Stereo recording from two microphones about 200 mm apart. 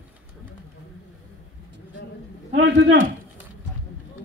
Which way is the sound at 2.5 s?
65° right (ahead or behind).